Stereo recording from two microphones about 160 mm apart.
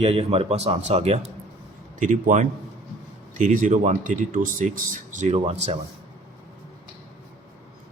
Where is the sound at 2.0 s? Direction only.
55° right (ahead or behind).